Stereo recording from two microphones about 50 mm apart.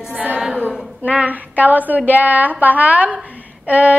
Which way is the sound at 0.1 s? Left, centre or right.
Right.